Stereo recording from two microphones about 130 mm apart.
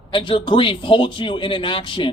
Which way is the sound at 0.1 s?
40° left (ahead or behind).